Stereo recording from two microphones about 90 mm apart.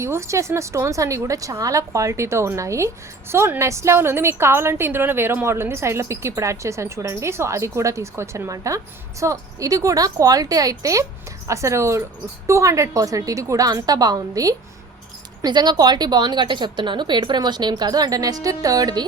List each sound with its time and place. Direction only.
0.0 s a woman's voice: 30° right (ahead or behind)